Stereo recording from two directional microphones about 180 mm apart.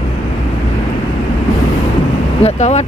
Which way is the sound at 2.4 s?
40° left (ahead or behind).